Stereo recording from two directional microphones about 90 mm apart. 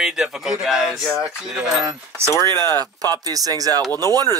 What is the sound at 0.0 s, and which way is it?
Speech, 5° right (ahead or behind).